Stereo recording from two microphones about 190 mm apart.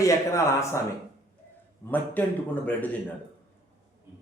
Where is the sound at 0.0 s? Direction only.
15° left (ahead or behind).